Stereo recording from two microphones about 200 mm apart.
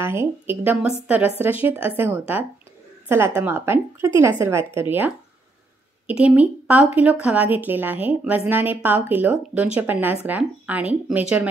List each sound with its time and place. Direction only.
0.0 s a woman's voice: 10° right (ahead or behind)